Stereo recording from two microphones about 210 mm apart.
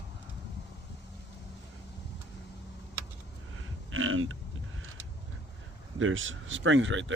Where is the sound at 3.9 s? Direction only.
75° right (ahead or behind).